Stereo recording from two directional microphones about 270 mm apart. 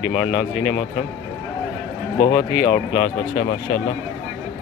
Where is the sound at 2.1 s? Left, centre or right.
Centre.